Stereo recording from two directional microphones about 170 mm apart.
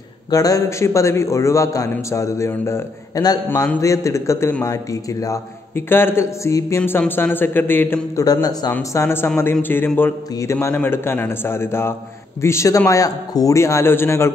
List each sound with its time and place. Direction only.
0.3 s a man's voice: 20° left (ahead or behind)